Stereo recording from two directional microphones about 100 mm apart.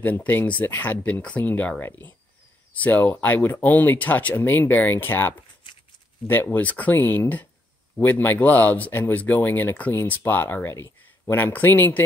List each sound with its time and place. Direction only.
0.0 s speech: 15° left (ahead or behind)